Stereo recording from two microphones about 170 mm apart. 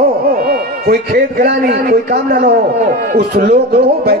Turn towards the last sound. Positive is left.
turn(degrees=-65)  # may be behind; listen again after turning